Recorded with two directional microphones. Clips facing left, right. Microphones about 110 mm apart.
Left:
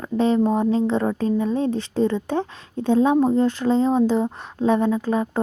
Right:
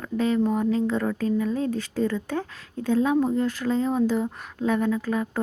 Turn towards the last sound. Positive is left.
turn(degrees=25)  # may be behind; listen again after turning